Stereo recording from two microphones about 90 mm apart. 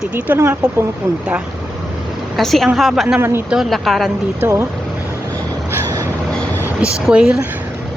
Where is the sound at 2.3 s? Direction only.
Centre (ahead or behind).